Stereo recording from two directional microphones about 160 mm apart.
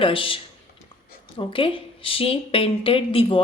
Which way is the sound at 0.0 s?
35° left (ahead or behind).